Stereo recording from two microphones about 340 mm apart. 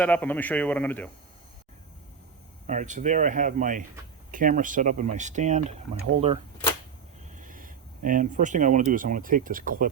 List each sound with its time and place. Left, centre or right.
0.0 s speech: centre
2.6 s speech: right